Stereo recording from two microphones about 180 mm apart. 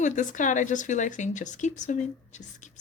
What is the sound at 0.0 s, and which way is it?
Speech, 45° left (ahead or behind).